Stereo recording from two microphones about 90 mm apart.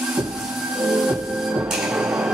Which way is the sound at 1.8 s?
10° right (ahead or behind).